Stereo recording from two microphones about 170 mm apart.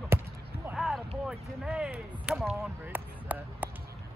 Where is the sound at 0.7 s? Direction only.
Centre (ahead or behind).